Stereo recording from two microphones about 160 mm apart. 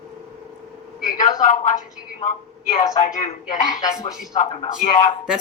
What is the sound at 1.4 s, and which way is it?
Speech, 50° left (ahead or behind).